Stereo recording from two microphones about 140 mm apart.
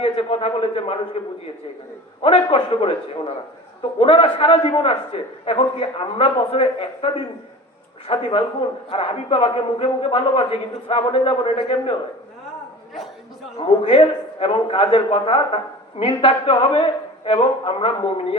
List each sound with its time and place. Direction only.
0.0 s a man's voice: 45° left (ahead or behind)
2.2 s a man's voice: 40° left (ahead or behind)
13.6 s a man's voice: 40° left (ahead or behind)